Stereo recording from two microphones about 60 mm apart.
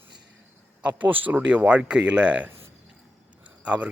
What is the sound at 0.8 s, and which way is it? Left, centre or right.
Speech, right.